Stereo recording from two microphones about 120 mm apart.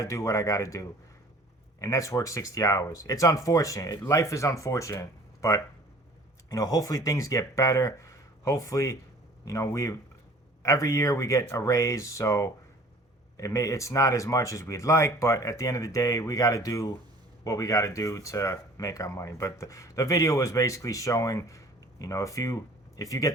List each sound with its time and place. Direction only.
0.0 s speech: 25° left (ahead or behind)